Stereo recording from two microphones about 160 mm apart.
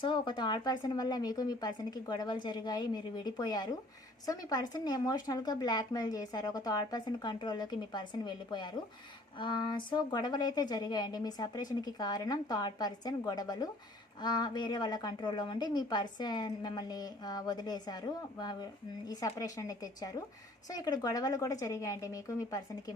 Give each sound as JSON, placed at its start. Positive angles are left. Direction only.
{"t": 0.0, "sound": "a woman's voice", "side_deg": 30}